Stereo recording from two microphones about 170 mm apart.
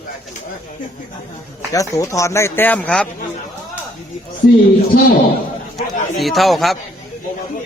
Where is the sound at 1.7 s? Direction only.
20° left (ahead or behind).